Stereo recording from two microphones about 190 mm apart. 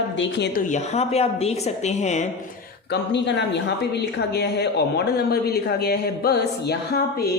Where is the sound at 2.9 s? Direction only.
65° left (ahead or behind).